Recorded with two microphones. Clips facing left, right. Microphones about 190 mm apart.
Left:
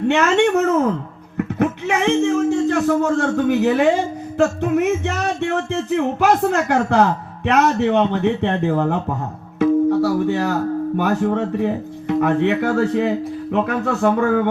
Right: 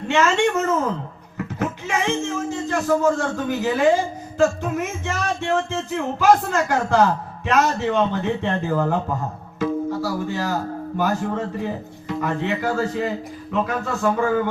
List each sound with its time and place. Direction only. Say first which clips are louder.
0.1 s speech: left 2 dB; 65° left (ahead or behind)